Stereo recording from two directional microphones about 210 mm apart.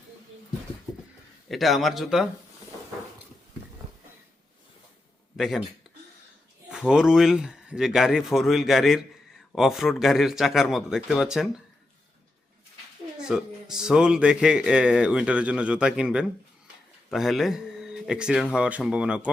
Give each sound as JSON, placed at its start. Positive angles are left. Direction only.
{"t": 1.5, "sound": "speech", "side_deg": 0}
{"t": 5.4, "sound": "speech", "side_deg": 0}
{"t": 6.7, "sound": "speech", "side_deg": -5}
{"t": 13.1, "sound": "speech", "side_deg": -5}